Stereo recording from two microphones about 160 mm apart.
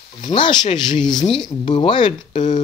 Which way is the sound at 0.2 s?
30° left (ahead or behind).